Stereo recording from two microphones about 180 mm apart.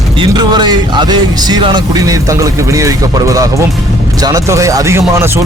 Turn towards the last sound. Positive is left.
turn(degrees=-15)  # may be behind; listen again after turning